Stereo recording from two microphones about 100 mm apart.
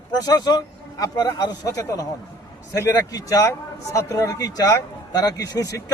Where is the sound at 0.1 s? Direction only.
40° left (ahead or behind).